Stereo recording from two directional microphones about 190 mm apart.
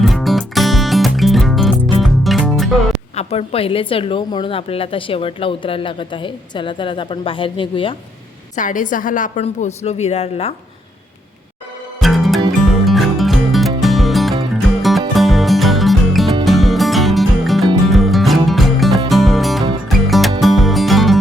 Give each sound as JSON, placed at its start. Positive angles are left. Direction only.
{"t": 0.0, "sound": "music", "side_deg": 0}
{"t": 3.2, "sound": "a woman's voice", "side_deg": 30}
{"t": 8.5, "sound": "a woman's voice", "side_deg": 45}
{"t": 11.9, "sound": "music", "side_deg": 0}